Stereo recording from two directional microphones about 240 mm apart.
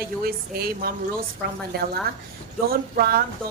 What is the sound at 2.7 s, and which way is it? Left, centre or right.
Speech, right.